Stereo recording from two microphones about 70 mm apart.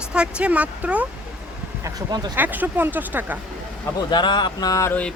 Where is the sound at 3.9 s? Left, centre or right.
Left.